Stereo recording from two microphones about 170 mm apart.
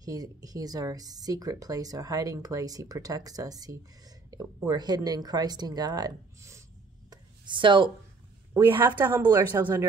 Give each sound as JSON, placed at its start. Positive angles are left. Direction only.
{"t": 0.0, "sound": "speech", "side_deg": -20}
{"t": 7.1, "sound": "a sound", "side_deg": -25}
{"t": 8.7, "sound": "a woman's voice", "side_deg": -10}
{"t": 9.2, "sound": "speech", "side_deg": -25}
{"t": 9.6, "sound": "a woman's voice", "side_deg": -10}